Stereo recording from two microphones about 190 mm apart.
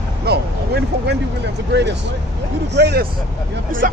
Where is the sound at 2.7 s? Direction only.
60° right (ahead or behind).